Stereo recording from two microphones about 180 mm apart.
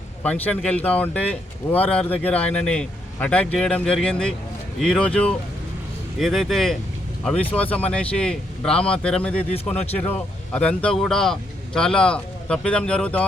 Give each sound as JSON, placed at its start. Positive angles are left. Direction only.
{"t": 0.2, "sound": "speech", "side_deg": 10}
{"t": 9.7, "sound": "speech", "side_deg": 35}
{"t": 10.5, "sound": "speech", "side_deg": 5}